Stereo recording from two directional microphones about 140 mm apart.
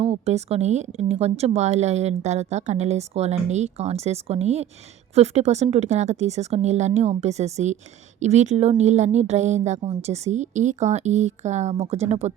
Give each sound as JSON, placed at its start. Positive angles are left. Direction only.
{"t": 0.0, "sound": "a woman's voice", "side_deg": -50}